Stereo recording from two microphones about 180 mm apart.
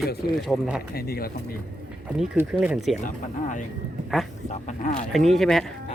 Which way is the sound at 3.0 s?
45° left (ahead or behind).